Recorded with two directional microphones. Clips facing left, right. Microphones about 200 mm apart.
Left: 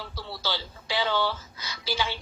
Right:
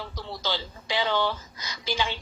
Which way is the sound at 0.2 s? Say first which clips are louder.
Right 2 dB; 15° right (ahead or behind).